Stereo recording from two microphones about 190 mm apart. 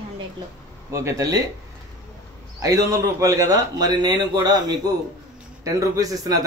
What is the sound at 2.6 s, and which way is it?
Speech, 20° right (ahead or behind).